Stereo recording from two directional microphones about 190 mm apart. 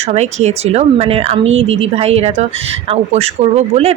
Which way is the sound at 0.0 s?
35° right (ahead or behind).